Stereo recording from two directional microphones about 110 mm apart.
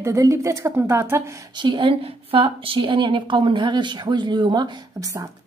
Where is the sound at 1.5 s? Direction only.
45° right (ahead or behind); by 5.3 s 30° right (ahead or behind).